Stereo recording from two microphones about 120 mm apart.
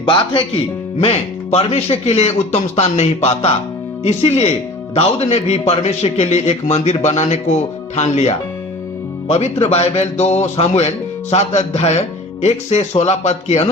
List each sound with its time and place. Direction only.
0.0 s speech: 40° left (ahead or behind)
1.0 s speech: 60° left (ahead or behind)
9.2 s speech: 65° left (ahead or behind)